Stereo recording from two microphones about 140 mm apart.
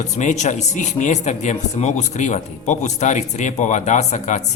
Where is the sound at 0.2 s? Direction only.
60° left (ahead or behind).